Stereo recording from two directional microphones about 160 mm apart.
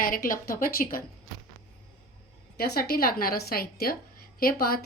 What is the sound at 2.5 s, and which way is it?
A woman's voice, 85° left.